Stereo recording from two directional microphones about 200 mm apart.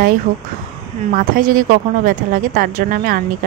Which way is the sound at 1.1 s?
45° right (ahead or behind).